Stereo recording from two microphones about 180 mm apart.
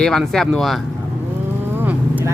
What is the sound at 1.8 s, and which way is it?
Vehicle, 10° right (ahead or behind).